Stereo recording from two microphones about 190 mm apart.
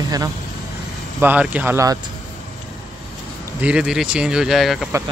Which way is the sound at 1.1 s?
10° right (ahead or behind).